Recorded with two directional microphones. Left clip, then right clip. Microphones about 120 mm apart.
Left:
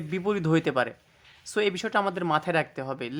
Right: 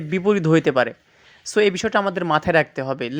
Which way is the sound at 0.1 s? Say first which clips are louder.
Right 8 dB; 25° right (ahead or behind).